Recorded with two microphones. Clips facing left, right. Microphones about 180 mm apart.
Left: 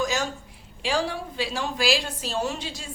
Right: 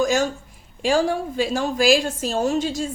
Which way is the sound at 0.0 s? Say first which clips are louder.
Right 7 dB; 50° right (ahead or behind).